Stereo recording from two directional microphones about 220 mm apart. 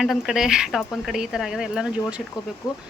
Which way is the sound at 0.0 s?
Centre (ahead or behind).